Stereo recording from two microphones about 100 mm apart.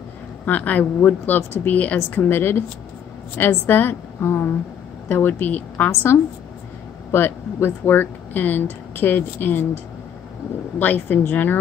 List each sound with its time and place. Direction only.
0.5 s a woman's voice: 15° left (ahead or behind)
10.8 s a woman's voice: 20° left (ahead or behind)